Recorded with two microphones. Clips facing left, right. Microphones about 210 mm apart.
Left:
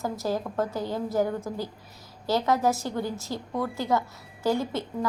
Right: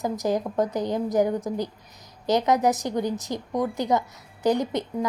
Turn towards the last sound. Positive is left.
turn(degrees=-20)  # may be behind; listen again after turning